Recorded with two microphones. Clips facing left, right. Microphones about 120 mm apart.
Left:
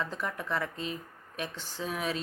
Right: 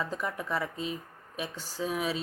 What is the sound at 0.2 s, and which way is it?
Speech, 10° right (ahead or behind).